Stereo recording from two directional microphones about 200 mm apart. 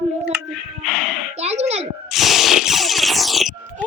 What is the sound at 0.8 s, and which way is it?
Speech, centre (ahead or behind).